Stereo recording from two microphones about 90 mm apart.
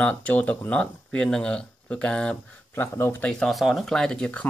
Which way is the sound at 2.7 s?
25° left (ahead or behind).